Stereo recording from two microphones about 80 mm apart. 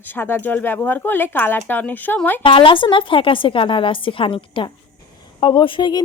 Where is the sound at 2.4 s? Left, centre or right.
Left.